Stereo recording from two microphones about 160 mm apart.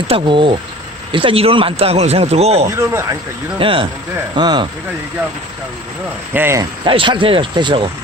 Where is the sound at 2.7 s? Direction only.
15° right (ahead or behind).